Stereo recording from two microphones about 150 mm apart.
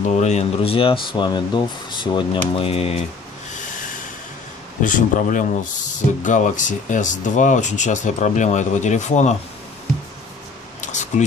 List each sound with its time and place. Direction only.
0.2 s speech: 45° left (ahead or behind)
4.8 s speech: 60° left (ahead or behind)
10.8 s a sound: 50° left (ahead or behind)